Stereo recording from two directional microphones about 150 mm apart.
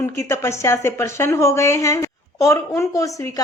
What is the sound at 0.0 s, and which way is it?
Speech, 15° left (ahead or behind).